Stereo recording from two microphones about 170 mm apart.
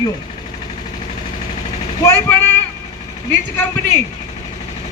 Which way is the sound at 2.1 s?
15° left (ahead or behind).